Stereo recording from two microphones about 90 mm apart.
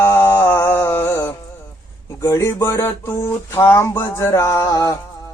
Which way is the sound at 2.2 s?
30° left (ahead or behind).